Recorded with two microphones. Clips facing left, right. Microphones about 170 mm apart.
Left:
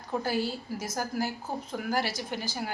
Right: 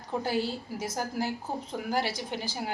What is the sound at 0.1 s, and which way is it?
A woman's voice, 20° right (ahead or behind).